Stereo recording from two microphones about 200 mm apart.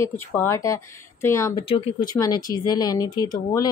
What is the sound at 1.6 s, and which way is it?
Speech, 25° left (ahead or behind).